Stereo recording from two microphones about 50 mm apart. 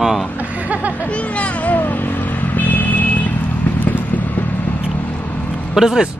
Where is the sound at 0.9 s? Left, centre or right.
Left.